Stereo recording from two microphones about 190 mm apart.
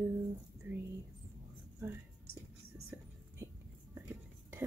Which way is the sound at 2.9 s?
10° right (ahead or behind).